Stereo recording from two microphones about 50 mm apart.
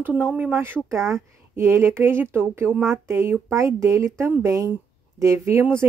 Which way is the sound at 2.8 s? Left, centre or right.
Right.